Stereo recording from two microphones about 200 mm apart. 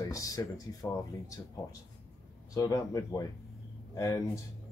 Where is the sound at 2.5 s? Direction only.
15° left (ahead or behind).